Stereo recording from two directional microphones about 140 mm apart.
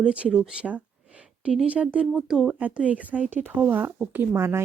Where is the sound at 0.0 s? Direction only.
10° right (ahead or behind).